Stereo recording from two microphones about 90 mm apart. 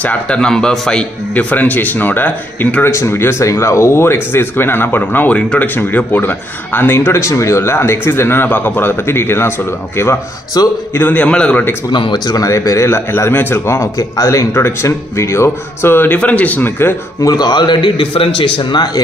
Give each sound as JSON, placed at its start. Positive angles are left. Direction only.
{"t": 0.0, "sound": "speech", "side_deg": 15}
{"t": 10.6, "sound": "a man's voice", "side_deg": 45}
{"t": 11.0, "sound": "a man's voice", "side_deg": 20}
{"t": 11.9, "sound": "a man's voice", "side_deg": 60}
{"t": 12.4, "sound": "speech", "side_deg": 35}
{"t": 17.3, "sound": "a man's voice", "side_deg": 50}